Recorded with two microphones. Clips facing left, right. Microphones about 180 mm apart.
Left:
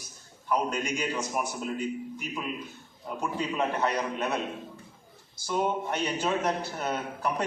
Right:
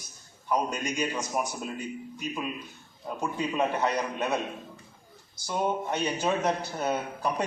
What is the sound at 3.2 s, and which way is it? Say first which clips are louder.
A man's voice: right 1 dB; 15° right (ahead or behind).